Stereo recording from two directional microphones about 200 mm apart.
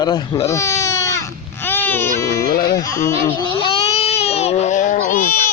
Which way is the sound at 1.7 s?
10° left (ahead or behind).